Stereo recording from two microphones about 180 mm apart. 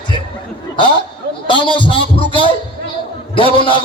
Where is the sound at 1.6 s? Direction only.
25° left (ahead or behind).